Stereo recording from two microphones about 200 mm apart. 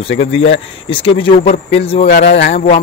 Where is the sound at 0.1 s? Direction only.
65° left (ahead or behind).